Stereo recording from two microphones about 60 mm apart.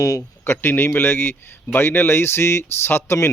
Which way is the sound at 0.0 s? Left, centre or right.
Left.